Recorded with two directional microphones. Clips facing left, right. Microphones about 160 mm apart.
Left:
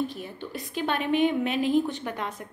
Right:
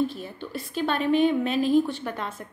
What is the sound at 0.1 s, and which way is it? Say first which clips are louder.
A woman's voice: right 1 dB; 15° left (ahead or behind).